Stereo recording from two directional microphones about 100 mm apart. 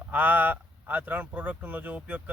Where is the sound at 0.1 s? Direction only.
15° right (ahead or behind).